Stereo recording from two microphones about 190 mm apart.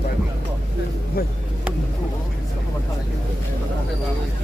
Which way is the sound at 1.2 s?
55° left (ahead or behind).